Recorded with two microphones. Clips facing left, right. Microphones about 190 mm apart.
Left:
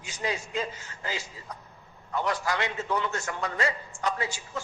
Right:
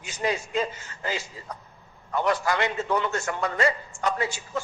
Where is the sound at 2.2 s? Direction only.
55° right (ahead or behind).